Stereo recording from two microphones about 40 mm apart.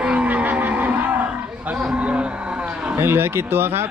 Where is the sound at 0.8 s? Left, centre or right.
Right.